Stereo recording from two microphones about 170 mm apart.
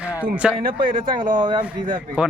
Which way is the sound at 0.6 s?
55° right (ahead or behind).